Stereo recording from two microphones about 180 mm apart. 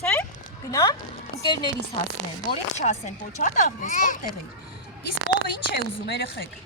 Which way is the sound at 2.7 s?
40° left (ahead or behind).